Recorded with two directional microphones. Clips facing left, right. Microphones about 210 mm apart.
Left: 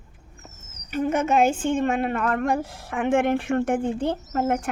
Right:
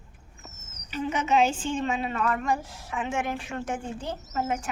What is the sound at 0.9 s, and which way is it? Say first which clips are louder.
A woman's voice: left 4 dB; 50° left (ahead or behind).